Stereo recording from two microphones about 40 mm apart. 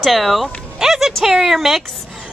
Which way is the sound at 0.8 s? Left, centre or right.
Centre.